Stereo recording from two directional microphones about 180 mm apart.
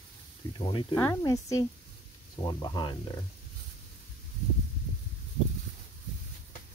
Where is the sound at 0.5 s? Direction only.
25° left (ahead or behind).